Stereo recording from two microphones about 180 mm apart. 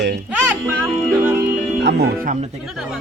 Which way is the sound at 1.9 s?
60° right (ahead or behind).